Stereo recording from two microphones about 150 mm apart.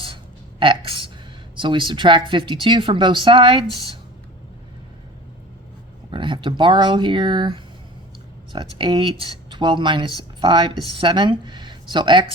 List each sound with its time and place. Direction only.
0.6 s speech: 35° right (ahead or behind)
6.1 s speech: 35° right (ahead or behind)